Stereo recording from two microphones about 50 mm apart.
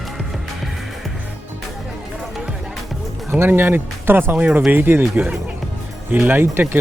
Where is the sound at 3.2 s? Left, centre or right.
Right.